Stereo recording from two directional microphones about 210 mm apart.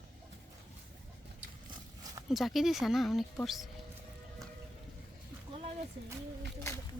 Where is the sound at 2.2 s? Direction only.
Centre (ahead or behind).